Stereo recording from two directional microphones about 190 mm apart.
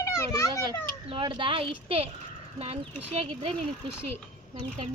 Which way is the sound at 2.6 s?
35° right (ahead or behind).